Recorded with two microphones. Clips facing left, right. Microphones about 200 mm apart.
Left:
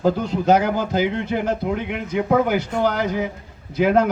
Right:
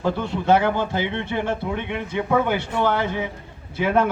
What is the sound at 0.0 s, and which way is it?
A man's voice, 40° left (ahead or behind).